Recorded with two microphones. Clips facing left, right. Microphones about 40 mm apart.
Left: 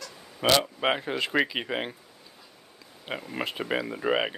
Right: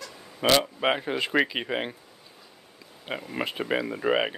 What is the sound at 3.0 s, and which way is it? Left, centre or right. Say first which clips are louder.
Speech: right 1 dB; centre.